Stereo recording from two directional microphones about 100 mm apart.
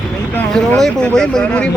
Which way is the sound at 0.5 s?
10° left (ahead or behind).